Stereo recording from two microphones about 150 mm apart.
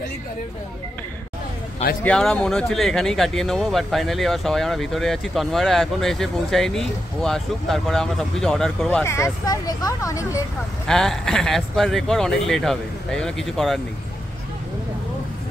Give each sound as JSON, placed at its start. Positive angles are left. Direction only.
{"t": 2.0, "sound": "speech", "side_deg": 5}
{"t": 9.0, "sound": "speech", "side_deg": 20}
{"t": 10.9, "sound": "speech", "side_deg": 5}